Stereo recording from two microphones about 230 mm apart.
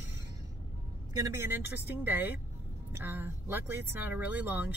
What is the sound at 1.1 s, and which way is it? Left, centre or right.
Speech, centre.